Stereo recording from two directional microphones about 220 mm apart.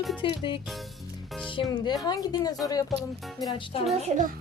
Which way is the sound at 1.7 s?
20° left (ahead or behind).